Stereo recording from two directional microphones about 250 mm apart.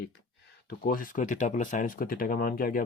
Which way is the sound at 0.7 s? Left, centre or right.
Left.